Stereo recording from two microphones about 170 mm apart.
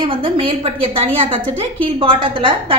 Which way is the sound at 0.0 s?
30° right (ahead or behind).